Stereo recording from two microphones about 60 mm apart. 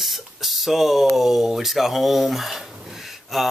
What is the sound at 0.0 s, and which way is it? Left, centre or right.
Speech, centre.